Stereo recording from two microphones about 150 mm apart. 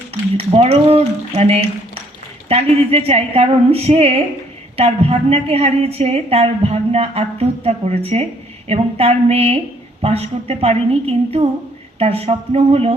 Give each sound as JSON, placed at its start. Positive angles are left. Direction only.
{"t": 0.1, "sound": "a woman's voice", "side_deg": -45}